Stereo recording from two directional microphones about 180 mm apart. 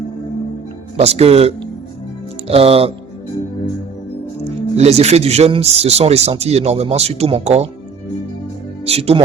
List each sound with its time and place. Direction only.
0.9 s speech: 35° right (ahead or behind)
4.4 s speech: 35° right (ahead or behind)
8.9 s speech: 35° right (ahead or behind)